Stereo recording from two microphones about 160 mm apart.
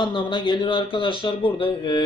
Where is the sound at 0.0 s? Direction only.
30° left (ahead or behind).